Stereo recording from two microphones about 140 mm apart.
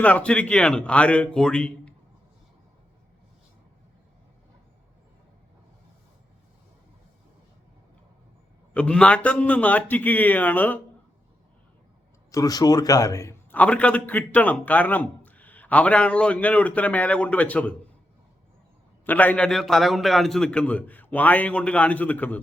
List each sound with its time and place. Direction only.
0.0 s a man's voice: 10° left (ahead or behind)
8.7 s a man's voice: 10° left (ahead or behind)
12.3 s speech: 25° left (ahead or behind)
13.5 s a man's voice: 10° left (ahead or behind)
19.0 s a man's voice: 10° left (ahead or behind)